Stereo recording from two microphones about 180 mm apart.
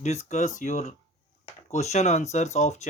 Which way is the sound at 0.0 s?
40° left (ahead or behind).